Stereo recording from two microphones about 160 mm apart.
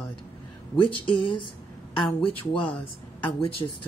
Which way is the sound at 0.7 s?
30° left (ahead or behind).